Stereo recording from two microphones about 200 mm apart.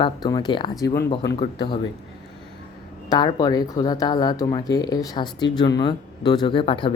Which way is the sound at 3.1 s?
20° left (ahead or behind).